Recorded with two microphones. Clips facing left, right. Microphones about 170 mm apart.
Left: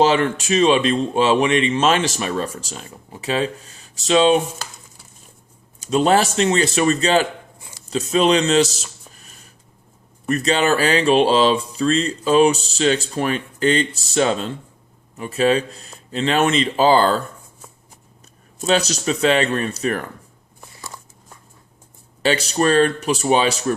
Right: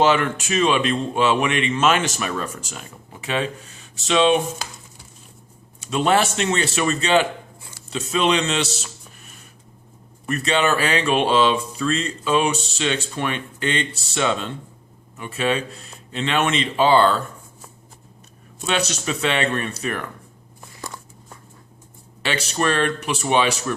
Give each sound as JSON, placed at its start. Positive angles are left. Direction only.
{"t": 0.0, "sound": "speech", "side_deg": 35}
{"t": 5.8, "sound": "speech", "side_deg": 35}
{"t": 10.2, "sound": "speech", "side_deg": 35}
{"t": 18.6, "sound": "speech", "side_deg": 40}
{"t": 22.2, "sound": "speech", "side_deg": 35}